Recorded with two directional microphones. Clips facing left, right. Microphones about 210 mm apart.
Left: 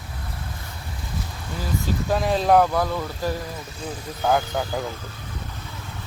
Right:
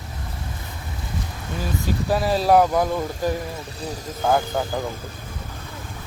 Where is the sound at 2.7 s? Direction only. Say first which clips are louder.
Right 3 dB; 15° right (ahead or behind).